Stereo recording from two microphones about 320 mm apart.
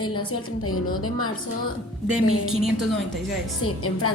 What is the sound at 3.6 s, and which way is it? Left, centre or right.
Speech, left.